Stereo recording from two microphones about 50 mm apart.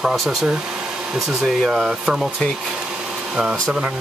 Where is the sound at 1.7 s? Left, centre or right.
Centre.